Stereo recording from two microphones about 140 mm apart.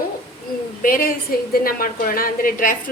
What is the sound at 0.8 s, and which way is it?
A woman's voice, 85° left.